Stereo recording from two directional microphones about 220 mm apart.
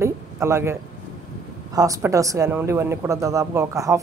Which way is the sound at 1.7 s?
15° right (ahead or behind).